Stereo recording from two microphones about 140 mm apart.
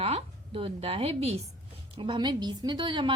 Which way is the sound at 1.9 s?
35° right (ahead or behind).